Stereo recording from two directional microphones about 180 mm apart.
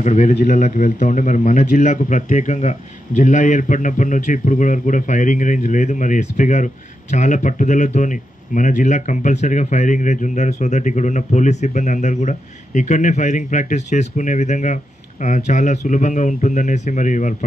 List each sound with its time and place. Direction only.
0.0 s a man's voice: 40° left (ahead or behind)